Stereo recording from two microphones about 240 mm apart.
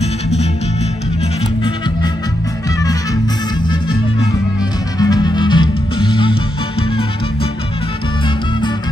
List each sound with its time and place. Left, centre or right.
4.9 s music: centre